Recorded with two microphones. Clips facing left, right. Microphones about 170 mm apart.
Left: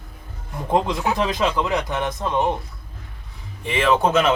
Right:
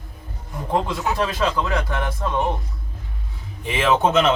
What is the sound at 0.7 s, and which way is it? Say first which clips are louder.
A man's voice: left 2 dB; 20° left (ahead or behind).